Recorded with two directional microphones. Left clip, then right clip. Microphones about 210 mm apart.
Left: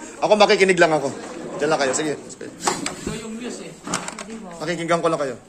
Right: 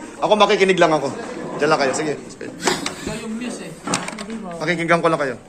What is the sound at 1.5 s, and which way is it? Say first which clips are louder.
Speech: right 3 dB; 20° left (ahead or behind).